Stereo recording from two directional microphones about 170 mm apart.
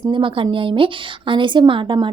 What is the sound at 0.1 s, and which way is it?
Speech, 30° right (ahead or behind).